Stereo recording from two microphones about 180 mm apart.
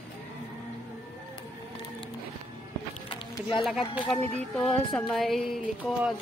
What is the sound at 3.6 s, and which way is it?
Speech, centre (ahead or behind).